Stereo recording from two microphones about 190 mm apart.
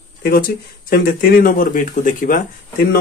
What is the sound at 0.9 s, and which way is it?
Speech, 50° left (ahead or behind).